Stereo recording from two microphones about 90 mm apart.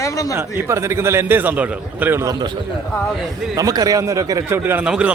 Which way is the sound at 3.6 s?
45° right (ahead or behind).